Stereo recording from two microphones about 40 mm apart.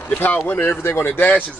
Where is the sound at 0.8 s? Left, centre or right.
Left.